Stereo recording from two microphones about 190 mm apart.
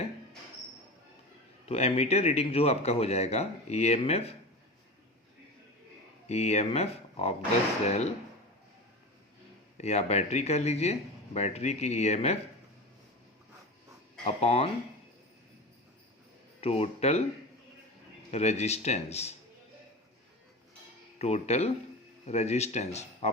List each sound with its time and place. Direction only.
1.6 s speech: 35° left (ahead or behind)
6.2 s speech: 35° left (ahead or behind)
9.7 s speech: 35° left (ahead or behind)
14.3 s speech: 35° left (ahead or behind)
16.6 s speech: 30° left (ahead or behind)
18.3 s speech: 35° left (ahead or behind)
21.2 s speech: 35° left (ahead or behind)